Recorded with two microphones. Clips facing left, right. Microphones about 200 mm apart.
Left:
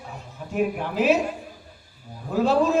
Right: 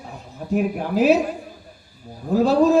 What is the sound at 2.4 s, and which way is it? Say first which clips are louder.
Speech: right 4 dB; 40° right (ahead or behind).